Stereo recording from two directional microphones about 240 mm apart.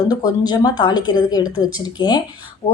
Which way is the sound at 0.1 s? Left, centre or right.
Centre.